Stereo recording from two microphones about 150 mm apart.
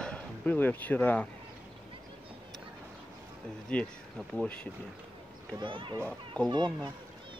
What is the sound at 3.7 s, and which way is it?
Speech, 10° left (ahead or behind).